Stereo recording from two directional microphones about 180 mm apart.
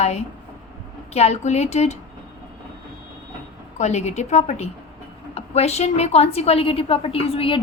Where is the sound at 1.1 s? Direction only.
35° left (ahead or behind).